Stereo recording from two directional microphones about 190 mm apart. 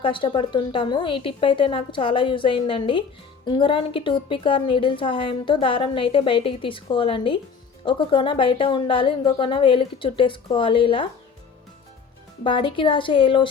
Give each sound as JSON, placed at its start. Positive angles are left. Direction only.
{"t": 0.0, "sound": "a woman's voice", "side_deg": 25}
{"t": 12.4, "sound": "a woman's voice", "side_deg": 25}